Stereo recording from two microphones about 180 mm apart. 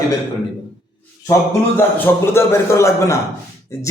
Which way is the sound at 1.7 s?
15° left (ahead or behind).